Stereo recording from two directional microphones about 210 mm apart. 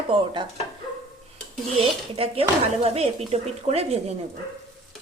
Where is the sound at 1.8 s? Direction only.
25° right (ahead or behind).